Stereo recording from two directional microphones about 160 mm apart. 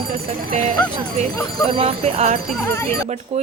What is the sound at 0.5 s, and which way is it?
Speech, 45° right (ahead or behind).